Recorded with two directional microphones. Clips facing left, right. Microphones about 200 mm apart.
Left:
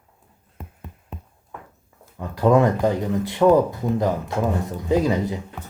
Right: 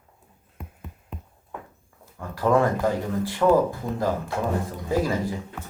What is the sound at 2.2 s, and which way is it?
Speech, 20° left (ahead or behind).